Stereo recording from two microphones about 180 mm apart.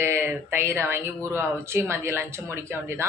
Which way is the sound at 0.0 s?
15° right (ahead or behind).